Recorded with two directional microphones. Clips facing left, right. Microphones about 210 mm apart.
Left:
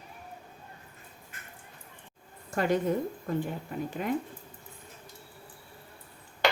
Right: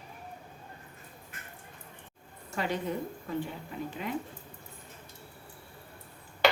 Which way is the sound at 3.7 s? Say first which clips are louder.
Left 3 dB; 50° left (ahead or behind).